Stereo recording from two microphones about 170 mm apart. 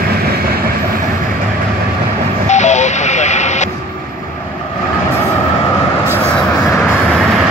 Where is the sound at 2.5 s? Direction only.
45° left (ahead or behind).